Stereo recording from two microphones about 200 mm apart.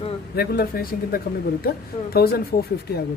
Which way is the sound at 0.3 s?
50° left (ahead or behind).